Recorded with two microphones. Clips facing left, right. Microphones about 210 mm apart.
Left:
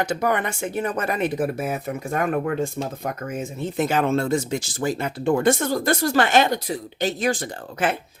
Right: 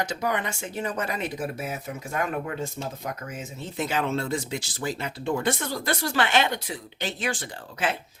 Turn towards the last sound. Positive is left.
turn(degrees=45)  # may be behind; listen again after turning